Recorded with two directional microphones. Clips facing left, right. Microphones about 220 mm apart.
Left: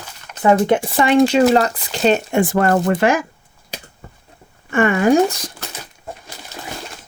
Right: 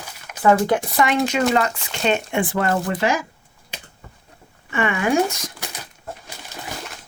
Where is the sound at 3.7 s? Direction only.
40° left (ahead or behind).